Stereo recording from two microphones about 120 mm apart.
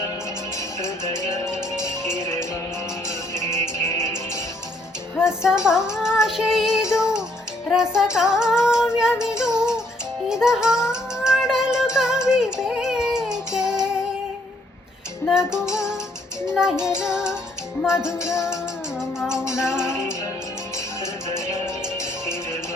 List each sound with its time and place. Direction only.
0.8 s music: 25° left (ahead or behind)
5.2 s child singing: 5° right (ahead or behind)
7.7 s female singing: 5° right (ahead or behind)
10.2 s music: 5° right (ahead or behind)
15.3 s female singing: 5° right (ahead or behind)
18.0 s music: 5° right (ahead or behind)